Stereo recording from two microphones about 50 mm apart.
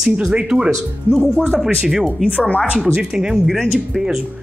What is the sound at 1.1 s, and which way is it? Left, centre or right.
Speech, left.